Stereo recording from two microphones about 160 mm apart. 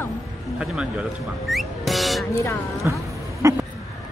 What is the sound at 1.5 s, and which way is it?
Music, centre (ahead or behind).